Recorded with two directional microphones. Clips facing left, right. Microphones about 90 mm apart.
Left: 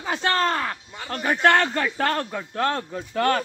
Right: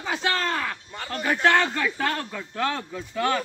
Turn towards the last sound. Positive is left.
turn(degrees=55)  # may be behind; listen again after turning